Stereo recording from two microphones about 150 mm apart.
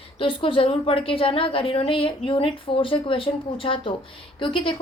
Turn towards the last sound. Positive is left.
turn(degrees=35)  # may be behind; listen again after turning